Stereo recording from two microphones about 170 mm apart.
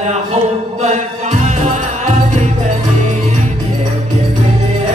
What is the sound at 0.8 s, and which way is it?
Music, 45° right (ahead or behind).